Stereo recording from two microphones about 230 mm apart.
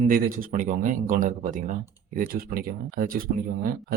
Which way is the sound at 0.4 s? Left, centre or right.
Right.